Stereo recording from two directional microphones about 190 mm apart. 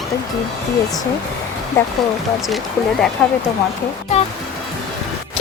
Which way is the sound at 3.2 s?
5° left (ahead or behind).